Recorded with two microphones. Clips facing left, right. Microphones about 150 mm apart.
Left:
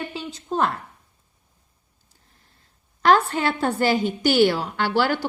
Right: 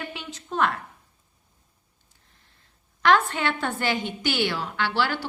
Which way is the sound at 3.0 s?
35° left (ahead or behind).